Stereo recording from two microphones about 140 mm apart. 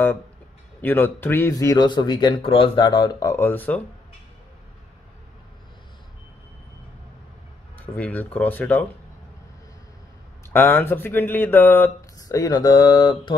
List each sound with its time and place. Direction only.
0.7 s speech: 15° left (ahead or behind)
7.7 s speech: 10° left (ahead or behind)
10.5 s speech: 15° left (ahead or behind); by 13.3 s 35° left (ahead or behind)